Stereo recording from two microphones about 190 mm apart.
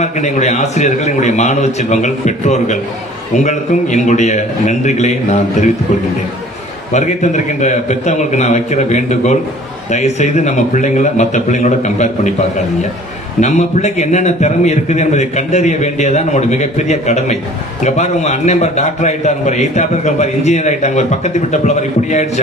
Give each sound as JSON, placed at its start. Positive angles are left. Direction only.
{"t": 0.0, "sound": "a man's voice", "side_deg": 35}
{"t": 6.9, "sound": "a man's voice", "side_deg": 40}
{"t": 13.4, "sound": "a man's voice", "side_deg": 35}